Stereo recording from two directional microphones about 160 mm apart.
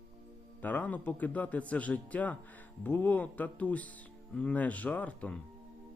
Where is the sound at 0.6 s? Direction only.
10° left (ahead or behind).